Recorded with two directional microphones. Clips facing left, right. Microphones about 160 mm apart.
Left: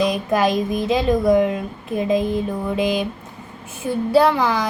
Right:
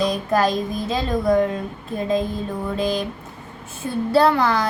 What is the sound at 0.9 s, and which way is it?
A woman's voice, 15° left (ahead or behind).